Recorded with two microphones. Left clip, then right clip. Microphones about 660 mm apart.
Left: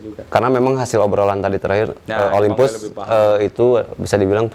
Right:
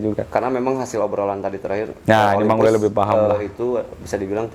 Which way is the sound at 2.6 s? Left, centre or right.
Left.